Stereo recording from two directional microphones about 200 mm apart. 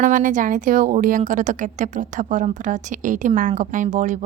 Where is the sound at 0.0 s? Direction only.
40° right (ahead or behind).